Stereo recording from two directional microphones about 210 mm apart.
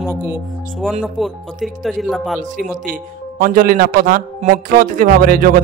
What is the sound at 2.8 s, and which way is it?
Speech, 40° right (ahead or behind).